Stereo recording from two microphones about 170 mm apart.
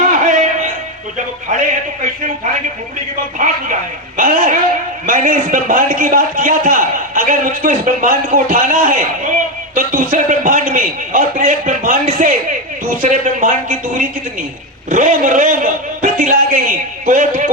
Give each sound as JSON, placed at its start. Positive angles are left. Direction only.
{"t": 0.0, "sound": "music", "side_deg": -50}
{"t": 1.5, "sound": "a man's voice", "side_deg": -50}